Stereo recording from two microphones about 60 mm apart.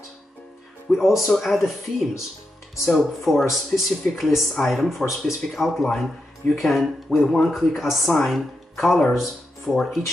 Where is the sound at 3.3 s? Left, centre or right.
Centre.